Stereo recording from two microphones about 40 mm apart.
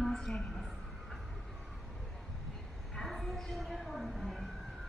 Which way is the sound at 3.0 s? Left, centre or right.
Centre.